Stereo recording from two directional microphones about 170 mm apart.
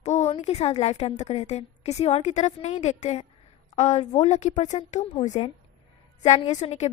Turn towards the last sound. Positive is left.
turn(degrees=45)  # may be behind; listen again after turning